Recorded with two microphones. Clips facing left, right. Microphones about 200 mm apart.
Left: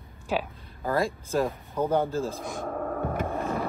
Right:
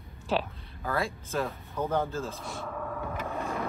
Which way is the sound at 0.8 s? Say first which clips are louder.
Left 5 dB; 35° left (ahead or behind).